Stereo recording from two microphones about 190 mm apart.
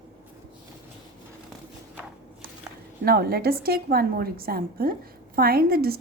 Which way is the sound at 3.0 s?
55° right (ahead or behind).